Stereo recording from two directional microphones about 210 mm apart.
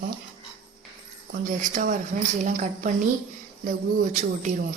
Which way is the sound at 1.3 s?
40° right (ahead or behind).